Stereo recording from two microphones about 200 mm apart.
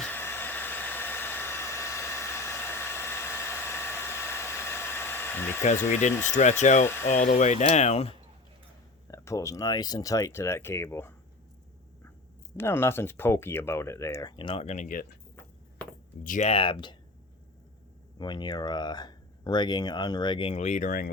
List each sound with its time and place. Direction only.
0.1 s hair dryer: 10° left (ahead or behind)
5.9 s speech: 35° left (ahead or behind)
6.8 s speech: 10° left (ahead or behind)
7.1 s speech: 40° left (ahead or behind)
9.0 s speech: 15° left (ahead or behind)
12.5 s speech: 10° left (ahead or behind); by 15.0 s 40° left (ahead or behind)
16.2 s speech: 35° left (ahead or behind)
18.2 s speech: 20° left (ahead or behind); by 21.1 s 45° left (ahead or behind)